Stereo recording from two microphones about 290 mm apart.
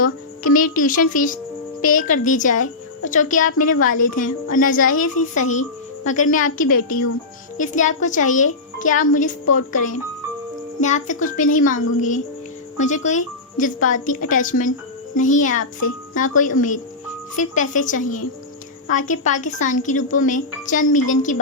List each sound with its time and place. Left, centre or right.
0.0 s a woman's voice: left
7.5 s a woman's voice: left